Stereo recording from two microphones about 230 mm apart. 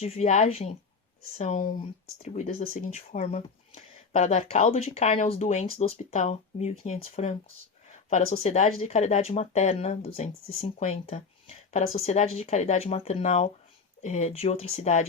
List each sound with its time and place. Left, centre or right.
0.0 s speech: left